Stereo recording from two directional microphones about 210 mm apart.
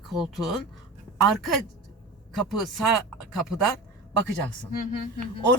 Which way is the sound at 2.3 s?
Centre (ahead or behind).